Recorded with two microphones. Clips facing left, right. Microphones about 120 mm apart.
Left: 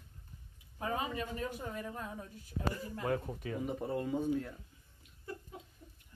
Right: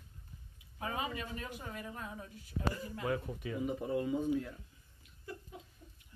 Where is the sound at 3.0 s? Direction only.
40° left (ahead or behind).